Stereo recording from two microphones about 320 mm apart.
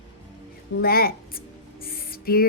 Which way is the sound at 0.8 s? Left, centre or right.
Left.